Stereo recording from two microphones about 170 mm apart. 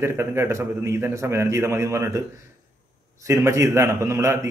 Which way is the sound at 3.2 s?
15° right (ahead or behind).